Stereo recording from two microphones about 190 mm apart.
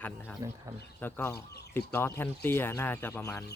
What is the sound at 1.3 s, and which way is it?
Speech, 60° left (ahead or behind).